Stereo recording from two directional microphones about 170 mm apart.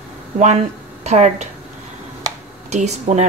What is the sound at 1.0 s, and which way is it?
Speech, 40° right (ahead or behind).